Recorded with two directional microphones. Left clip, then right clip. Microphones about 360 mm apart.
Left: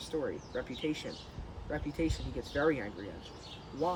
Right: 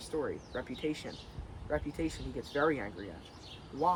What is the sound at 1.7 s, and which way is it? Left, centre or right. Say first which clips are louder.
Speech: even; centre.